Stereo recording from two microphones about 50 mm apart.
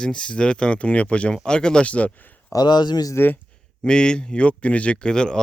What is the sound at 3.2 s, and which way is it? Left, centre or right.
Speech, left.